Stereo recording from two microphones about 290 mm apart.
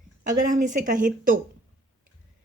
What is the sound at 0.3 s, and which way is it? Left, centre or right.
A woman's voice, right.